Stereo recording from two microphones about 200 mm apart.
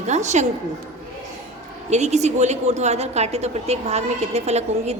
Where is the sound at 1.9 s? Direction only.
35° right (ahead or behind).